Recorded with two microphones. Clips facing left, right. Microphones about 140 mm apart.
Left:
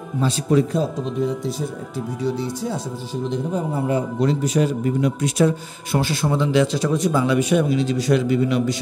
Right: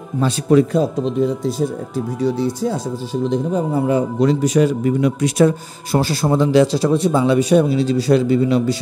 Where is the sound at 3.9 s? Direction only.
90° right.